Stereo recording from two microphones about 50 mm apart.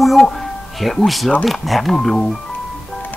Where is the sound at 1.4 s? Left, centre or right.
Centre.